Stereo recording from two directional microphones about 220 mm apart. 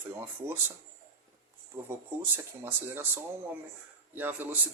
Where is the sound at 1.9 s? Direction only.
10° right (ahead or behind).